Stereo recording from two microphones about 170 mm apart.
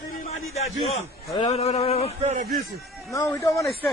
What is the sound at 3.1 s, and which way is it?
Speech, 20° left (ahead or behind).